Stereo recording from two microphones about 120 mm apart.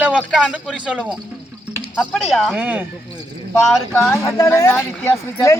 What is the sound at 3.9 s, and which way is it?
Speech, 20° left (ahead or behind).